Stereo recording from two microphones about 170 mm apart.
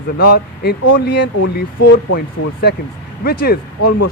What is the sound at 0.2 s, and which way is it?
Speech, 65° left (ahead or behind).